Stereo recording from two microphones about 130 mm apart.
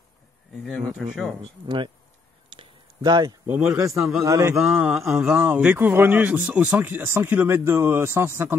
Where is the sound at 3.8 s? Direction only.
25° right (ahead or behind).